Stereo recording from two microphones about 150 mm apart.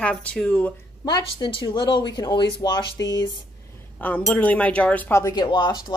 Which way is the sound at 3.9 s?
10° left (ahead or behind).